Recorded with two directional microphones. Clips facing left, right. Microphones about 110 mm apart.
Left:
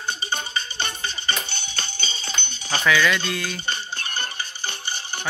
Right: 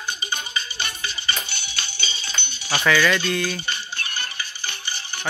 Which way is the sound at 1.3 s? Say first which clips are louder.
Left 1 dB; 45° left (ahead or behind).